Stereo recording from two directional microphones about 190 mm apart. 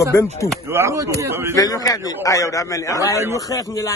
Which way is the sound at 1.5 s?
20° left (ahead or behind).